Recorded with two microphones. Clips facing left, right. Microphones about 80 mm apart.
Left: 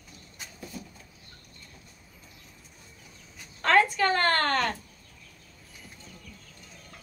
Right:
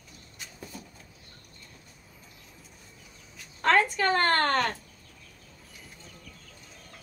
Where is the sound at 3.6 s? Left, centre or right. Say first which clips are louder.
Left 1 dB; right.